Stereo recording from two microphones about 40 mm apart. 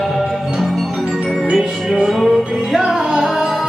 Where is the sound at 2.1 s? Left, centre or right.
Centre.